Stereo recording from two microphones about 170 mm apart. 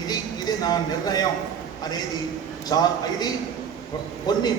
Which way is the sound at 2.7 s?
20° left (ahead or behind).